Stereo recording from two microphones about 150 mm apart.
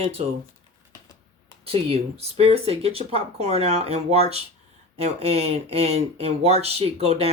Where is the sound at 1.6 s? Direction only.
40° right (ahead or behind).